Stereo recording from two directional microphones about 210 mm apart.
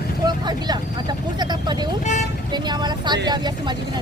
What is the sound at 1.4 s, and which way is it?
Vehicle, 20° right (ahead or behind).